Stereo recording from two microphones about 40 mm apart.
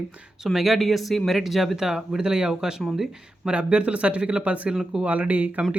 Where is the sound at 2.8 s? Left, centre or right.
Centre.